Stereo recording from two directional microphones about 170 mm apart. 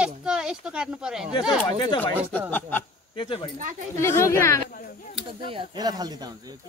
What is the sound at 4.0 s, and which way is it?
Speech, 15° left (ahead or behind).